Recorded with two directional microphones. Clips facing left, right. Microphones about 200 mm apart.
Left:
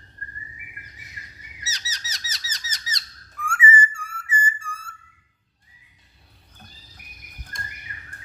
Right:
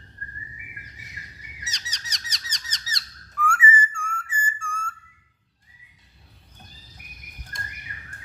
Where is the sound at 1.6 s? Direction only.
5° left (ahead or behind).